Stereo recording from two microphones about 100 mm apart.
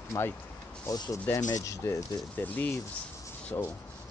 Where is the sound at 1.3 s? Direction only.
30° left (ahead or behind).